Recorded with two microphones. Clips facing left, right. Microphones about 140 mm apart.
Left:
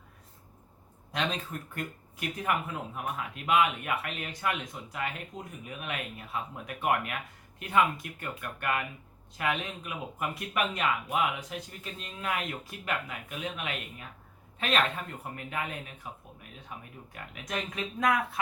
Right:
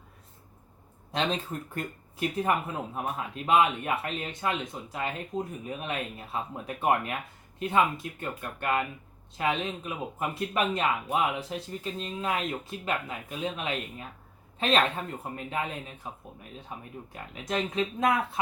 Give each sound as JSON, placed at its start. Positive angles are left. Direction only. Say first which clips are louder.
{"t": 1.1, "sound": "speech", "louder": "right 3 dB", "side_deg": -30}